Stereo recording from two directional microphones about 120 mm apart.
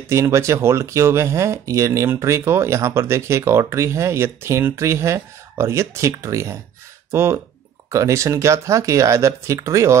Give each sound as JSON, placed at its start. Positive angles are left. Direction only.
{"t": 0.0, "sound": "speech", "side_deg": -25}